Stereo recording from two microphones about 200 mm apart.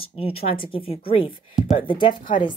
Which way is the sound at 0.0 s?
30° left (ahead or behind).